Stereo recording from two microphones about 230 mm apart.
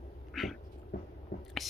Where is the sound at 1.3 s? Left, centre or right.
Left.